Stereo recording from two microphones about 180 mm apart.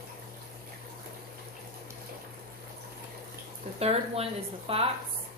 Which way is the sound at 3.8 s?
35° right (ahead or behind).